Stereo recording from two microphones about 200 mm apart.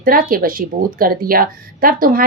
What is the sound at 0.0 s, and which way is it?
Speech, 45° right (ahead or behind).